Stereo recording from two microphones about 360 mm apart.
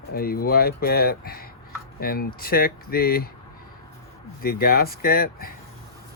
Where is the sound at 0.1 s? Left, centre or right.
Left.